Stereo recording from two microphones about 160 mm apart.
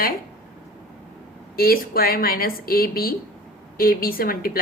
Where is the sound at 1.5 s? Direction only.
70° left (ahead or behind).